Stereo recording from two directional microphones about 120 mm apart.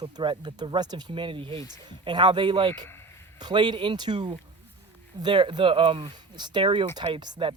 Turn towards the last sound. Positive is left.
turn(degrees=-40)  # may be behind; listen again after turning